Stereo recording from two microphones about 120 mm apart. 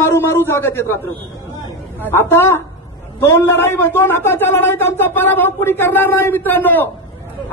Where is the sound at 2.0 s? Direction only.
20° left (ahead or behind).